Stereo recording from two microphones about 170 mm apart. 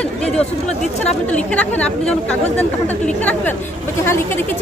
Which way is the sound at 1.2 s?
10° left (ahead or behind).